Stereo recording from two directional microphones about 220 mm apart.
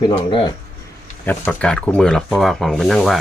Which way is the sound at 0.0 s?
25° left (ahead or behind).